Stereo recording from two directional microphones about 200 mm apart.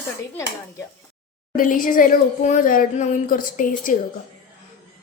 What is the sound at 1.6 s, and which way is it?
Speech, 45° left (ahead or behind).